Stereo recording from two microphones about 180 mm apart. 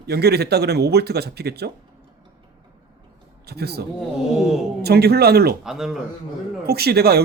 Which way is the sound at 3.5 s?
65° right (ahead or behind).